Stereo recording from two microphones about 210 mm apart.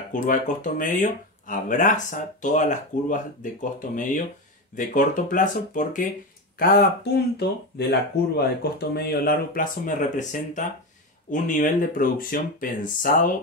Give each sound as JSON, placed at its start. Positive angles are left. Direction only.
{"t": 0.1, "sound": "speech", "side_deg": 40}